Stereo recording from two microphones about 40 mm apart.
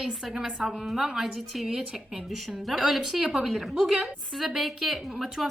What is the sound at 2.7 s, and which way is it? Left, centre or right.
A woman's voice, centre.